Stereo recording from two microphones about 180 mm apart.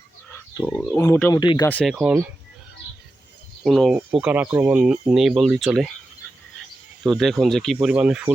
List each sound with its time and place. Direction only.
0.7 s speech: centre (ahead or behind)
0.9 s speech: 15° left (ahead or behind)
1.6 s speech: 10° left (ahead or behind)
1.9 s speech: 5° right (ahead or behind)
3.6 s speech: centre (ahead or behind)
7.0 s speech: centre (ahead or behind)